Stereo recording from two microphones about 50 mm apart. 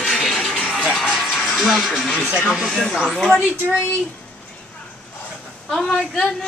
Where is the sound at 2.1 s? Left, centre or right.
Centre.